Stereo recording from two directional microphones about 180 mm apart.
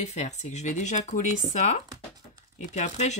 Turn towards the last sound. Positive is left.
turn(degrees=40)  # may be behind; listen again after turning